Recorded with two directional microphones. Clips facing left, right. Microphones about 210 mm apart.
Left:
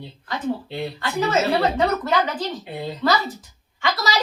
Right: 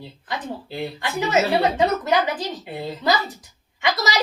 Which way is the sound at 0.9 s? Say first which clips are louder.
Left 1 dB; 15° right (ahead or behind).